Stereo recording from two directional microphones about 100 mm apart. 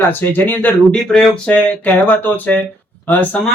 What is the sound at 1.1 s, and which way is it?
Speech, 5° left (ahead or behind).